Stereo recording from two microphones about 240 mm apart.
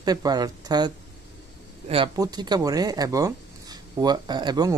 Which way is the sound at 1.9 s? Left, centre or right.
Centre.